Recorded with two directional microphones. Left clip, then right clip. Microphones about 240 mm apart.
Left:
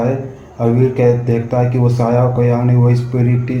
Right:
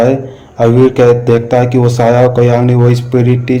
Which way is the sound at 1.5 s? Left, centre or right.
Right.